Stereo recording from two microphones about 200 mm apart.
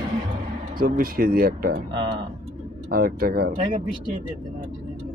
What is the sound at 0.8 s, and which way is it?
Speech, 50° right (ahead or behind).